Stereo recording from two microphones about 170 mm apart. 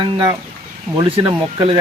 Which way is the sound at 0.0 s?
25° right (ahead or behind).